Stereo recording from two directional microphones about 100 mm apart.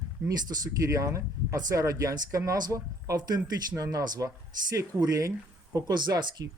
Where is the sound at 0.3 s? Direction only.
40° right (ahead or behind).